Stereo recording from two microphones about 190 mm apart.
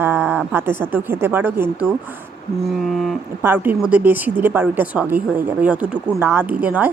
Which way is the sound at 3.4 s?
10° right (ahead or behind).